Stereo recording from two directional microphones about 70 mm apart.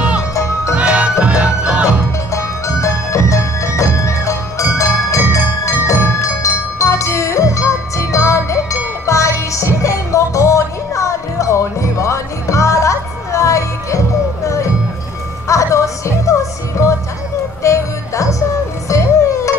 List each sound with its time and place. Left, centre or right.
0.3 s music: left
0.7 s music: centre
2.3 s music: left